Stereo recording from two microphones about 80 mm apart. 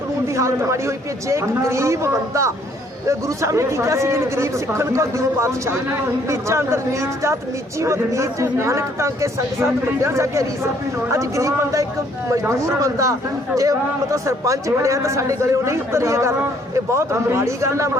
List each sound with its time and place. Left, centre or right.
0.3 s speech: right